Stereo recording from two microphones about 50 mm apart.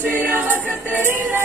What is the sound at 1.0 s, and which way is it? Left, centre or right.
Synthetic singing, right.